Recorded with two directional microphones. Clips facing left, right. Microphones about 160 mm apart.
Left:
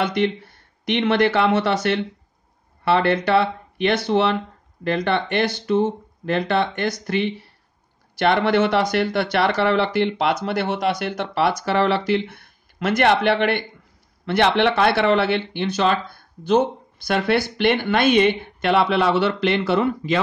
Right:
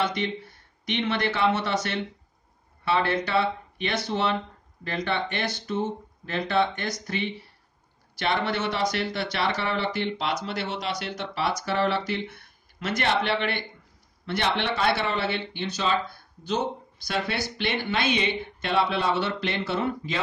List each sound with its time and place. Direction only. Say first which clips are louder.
0.0 s speech: left 6 dB; 60° left (ahead or behind)
11.6 s speech: left 6 dB; 80° left
12.7 s speech: left 8 dB; 60° left (ahead or behind); by 20.2 s 75° left (ahead or behind)